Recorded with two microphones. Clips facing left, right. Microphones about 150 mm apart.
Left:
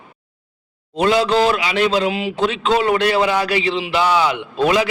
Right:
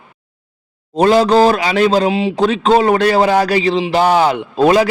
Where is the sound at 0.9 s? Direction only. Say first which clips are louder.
Right 5 dB; 40° right (ahead or behind).